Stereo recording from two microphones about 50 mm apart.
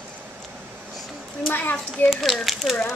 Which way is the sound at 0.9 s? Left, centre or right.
Centre.